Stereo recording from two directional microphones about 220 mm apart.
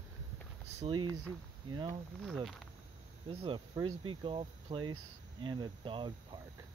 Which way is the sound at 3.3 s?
20° right (ahead or behind).